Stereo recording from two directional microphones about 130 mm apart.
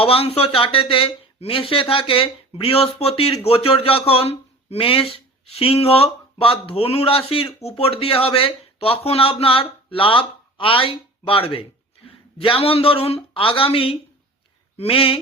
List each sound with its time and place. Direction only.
0.0 s a man's voice: 45° left (ahead or behind)